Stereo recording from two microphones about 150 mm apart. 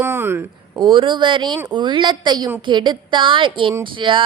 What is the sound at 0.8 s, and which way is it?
Speech, 30° right (ahead or behind).